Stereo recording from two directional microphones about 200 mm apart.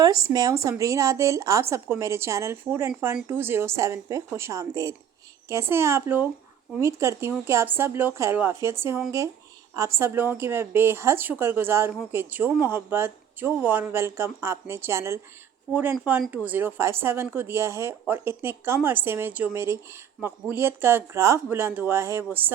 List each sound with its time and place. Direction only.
0.0 s speech: 15° right (ahead or behind)